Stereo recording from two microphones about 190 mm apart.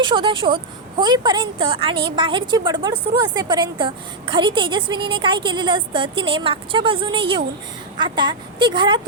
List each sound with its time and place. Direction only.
0.0 s a woman's voice: 25° right (ahead or behind)